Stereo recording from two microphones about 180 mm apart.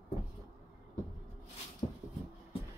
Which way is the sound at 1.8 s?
20° left (ahead or behind).